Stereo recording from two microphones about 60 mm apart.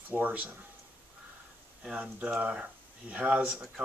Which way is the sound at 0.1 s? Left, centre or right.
Right.